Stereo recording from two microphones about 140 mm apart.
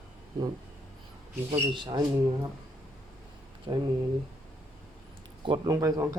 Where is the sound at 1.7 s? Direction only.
35° right (ahead or behind).